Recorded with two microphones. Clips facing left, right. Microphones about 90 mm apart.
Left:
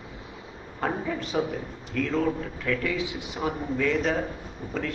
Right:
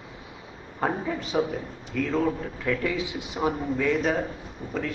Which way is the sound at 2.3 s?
20° right (ahead or behind).